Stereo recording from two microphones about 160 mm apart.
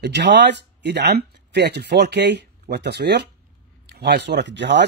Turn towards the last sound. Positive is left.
turn(degrees=-90)